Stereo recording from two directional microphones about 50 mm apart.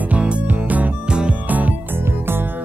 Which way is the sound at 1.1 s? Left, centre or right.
Centre.